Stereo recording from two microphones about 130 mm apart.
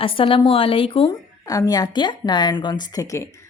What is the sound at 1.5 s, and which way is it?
A woman's voice, 30° left (ahead or behind).